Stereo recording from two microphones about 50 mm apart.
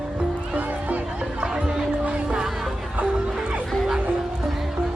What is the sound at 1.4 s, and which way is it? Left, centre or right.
Music, centre.